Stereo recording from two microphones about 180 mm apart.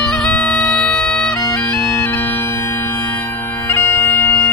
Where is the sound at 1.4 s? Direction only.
20° left (ahead or behind).